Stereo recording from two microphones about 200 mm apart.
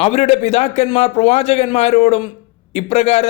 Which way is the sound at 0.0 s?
30° left (ahead or behind).